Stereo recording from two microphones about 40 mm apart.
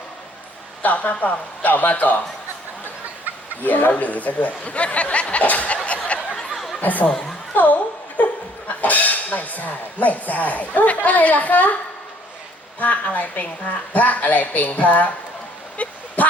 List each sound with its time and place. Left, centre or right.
0.8 s a man's voice: left
3.6 s speech: left
6.3 s a sound: centre
6.8 s a man's voice: left
12.8 s speech: left